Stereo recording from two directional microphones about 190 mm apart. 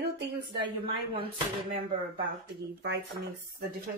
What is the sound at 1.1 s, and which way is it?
Speech, 30° right (ahead or behind).